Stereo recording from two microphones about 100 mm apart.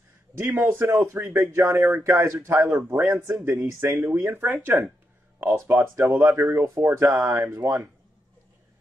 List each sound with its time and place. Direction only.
0.3 s speech: 20° right (ahead or behind)
5.4 s speech: 25° right (ahead or behind)